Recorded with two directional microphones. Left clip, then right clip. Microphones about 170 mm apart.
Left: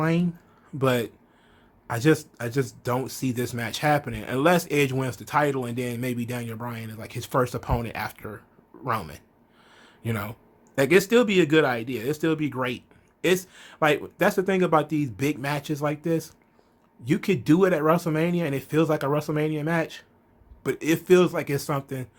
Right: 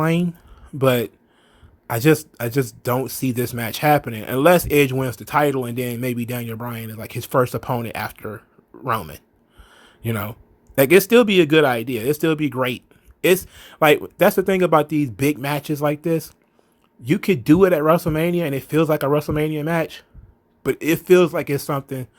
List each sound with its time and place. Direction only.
0.0 s speech: 45° right (ahead or behind)
9.6 s a sound: 35° right (ahead or behind)
10.8 s speech: 40° right (ahead or behind)